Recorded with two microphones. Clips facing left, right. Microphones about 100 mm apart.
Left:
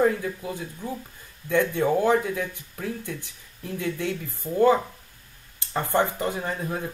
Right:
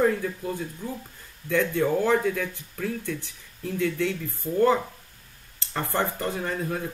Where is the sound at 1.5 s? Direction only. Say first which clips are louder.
Left 1 dB; 20° left (ahead or behind).